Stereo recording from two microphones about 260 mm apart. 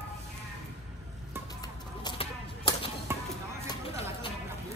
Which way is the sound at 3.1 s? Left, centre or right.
Centre.